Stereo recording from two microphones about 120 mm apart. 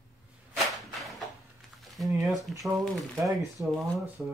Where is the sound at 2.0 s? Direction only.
Centre (ahead or behind).